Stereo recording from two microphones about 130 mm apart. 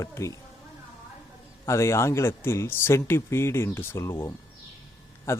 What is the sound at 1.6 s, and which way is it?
Speech, 20° left (ahead or behind).